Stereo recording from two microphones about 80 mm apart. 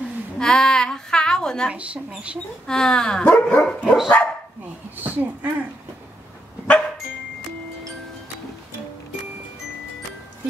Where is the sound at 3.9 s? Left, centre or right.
Centre.